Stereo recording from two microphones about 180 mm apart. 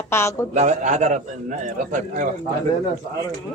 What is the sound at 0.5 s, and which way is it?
A man's voice, 40° right (ahead or behind).